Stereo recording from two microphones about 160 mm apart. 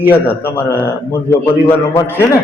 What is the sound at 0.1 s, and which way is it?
A man's voice, 15° left (ahead or behind).